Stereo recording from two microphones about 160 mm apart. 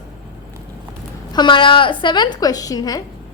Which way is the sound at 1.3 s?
30° left (ahead or behind).